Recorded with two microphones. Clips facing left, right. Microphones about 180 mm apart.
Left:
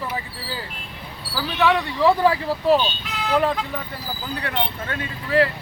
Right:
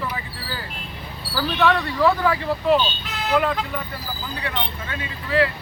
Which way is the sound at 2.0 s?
30° left (ahead or behind).